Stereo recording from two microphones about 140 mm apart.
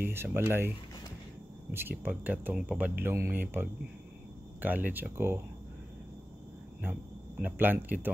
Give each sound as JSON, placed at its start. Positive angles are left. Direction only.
{"t": 0.0, "sound": "speech", "side_deg": -15}
{"t": 1.7, "sound": "speech", "side_deg": -15}
{"t": 7.4, "sound": "speech", "side_deg": -15}